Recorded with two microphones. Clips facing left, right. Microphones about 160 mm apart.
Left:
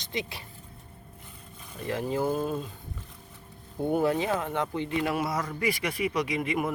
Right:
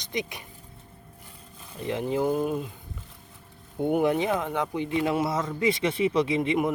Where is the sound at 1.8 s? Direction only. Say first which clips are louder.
Right 2 dB; 20° right (ahead or behind).